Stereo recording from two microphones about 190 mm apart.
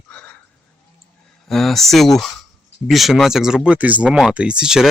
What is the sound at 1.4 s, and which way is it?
Speech, centre (ahead or behind).